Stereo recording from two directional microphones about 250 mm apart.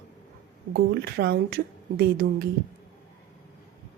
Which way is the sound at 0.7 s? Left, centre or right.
Right.